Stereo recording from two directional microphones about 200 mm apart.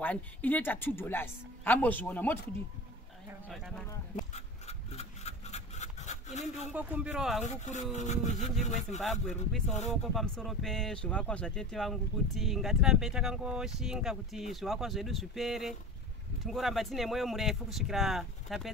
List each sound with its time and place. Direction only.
0.0 s speech: 10° left (ahead or behind)
3.4 s speech: centre (ahead or behind)
4.2 s a sound: 35° left (ahead or behind)
6.7 s speech: 5° right (ahead or behind)
7.4 s speech: 35° left (ahead or behind)
9.0 s speech: centre (ahead or behind)